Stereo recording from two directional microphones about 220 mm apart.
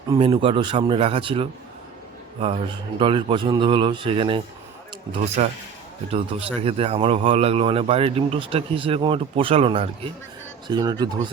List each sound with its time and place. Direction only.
0.1 s speech: 25° right (ahead or behind)